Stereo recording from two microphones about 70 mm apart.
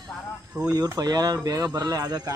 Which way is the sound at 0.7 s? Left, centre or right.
Right.